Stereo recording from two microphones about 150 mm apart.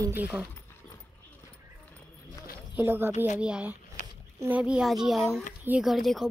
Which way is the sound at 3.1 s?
50° left (ahead or behind).